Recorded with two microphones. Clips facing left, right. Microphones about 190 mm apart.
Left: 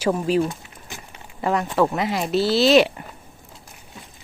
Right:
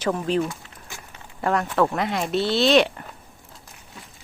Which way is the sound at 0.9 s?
20° left (ahead or behind).